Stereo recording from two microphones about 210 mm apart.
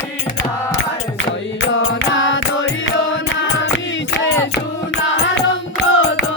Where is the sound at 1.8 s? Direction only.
65° left (ahead or behind).